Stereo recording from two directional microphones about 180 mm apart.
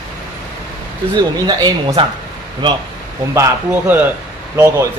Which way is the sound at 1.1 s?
20° right (ahead or behind).